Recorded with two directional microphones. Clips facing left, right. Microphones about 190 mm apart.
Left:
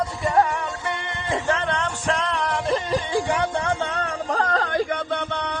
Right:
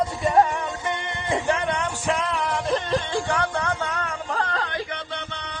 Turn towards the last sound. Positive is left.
turn(degrees=55)  # may be behind; listen again after turning